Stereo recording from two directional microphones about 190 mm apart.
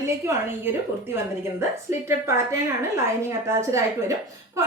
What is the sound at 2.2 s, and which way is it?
Speech, 15° right (ahead or behind).